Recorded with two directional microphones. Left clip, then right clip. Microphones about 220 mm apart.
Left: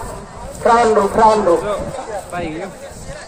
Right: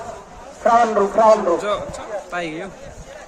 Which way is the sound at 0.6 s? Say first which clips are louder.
Left 3 dB; 25° left (ahead or behind).